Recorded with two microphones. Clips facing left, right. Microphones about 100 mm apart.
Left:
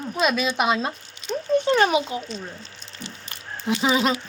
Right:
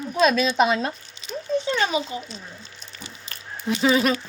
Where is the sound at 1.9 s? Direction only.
65° left (ahead or behind).